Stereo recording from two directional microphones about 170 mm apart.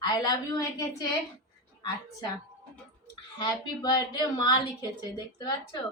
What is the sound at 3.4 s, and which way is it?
A woman's voice, 25° left (ahead or behind).